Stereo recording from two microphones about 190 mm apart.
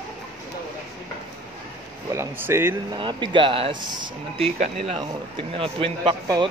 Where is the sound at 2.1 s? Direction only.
15° right (ahead or behind).